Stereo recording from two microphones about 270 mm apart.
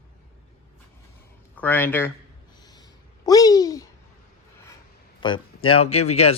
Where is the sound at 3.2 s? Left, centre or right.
Centre.